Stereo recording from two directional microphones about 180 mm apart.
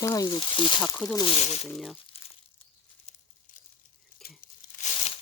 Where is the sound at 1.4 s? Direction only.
40° left (ahead or behind).